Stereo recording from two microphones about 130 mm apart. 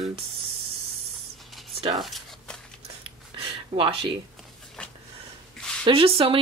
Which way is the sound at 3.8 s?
45° right (ahead or behind).